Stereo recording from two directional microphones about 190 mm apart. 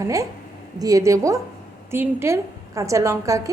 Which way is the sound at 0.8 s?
15° right (ahead or behind).